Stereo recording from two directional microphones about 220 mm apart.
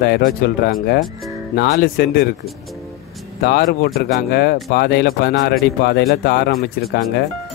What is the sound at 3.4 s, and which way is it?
Speech, 45° left (ahead or behind).